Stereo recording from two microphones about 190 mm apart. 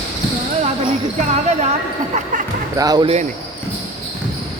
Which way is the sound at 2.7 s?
20° right (ahead or behind).